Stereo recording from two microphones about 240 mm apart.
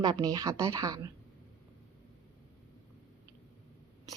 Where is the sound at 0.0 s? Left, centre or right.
Centre.